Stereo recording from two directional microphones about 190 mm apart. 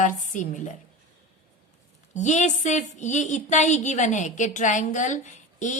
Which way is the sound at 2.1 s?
40° left (ahead or behind).